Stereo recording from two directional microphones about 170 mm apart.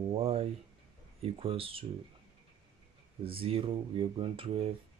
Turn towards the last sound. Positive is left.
turn(degrees=-30)  # may be behind; listen again after turning